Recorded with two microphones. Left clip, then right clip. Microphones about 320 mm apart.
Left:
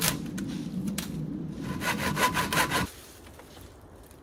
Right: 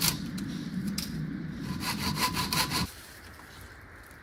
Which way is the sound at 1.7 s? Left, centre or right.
Centre.